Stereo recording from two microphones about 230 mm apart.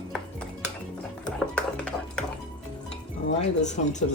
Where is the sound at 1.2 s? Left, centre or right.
Centre.